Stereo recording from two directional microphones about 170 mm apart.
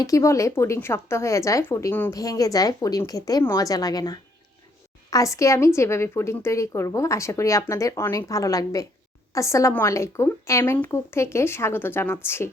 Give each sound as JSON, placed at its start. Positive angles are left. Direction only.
{"t": 0.0, "sound": "a woman's voice", "side_deg": 20}